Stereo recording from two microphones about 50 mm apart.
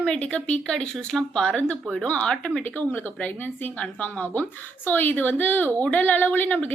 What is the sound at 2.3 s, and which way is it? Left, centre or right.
Speech, centre.